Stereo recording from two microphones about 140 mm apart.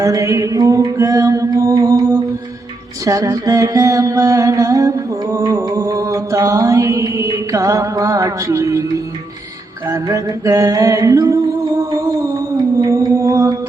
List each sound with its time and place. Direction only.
0.0 s mantra: 25° right (ahead or behind)
9.9 s music: 25° right (ahead or behind)